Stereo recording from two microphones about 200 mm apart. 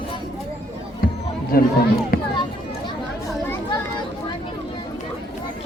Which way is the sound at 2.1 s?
45° left (ahead or behind).